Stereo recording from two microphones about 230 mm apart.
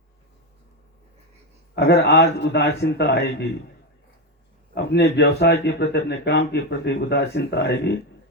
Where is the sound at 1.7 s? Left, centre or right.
Left.